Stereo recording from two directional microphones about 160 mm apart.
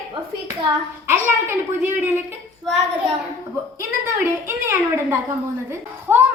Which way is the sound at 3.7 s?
15° right (ahead or behind).